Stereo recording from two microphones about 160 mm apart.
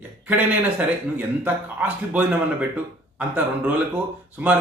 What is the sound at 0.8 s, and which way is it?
Speech, 10° right (ahead or behind).